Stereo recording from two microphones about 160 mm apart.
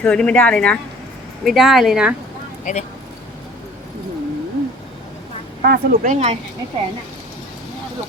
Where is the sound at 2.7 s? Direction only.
50° left (ahead or behind).